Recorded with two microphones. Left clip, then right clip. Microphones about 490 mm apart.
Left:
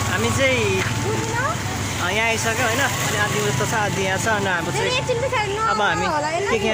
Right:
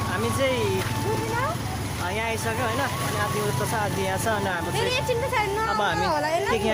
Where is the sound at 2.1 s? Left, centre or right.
Right.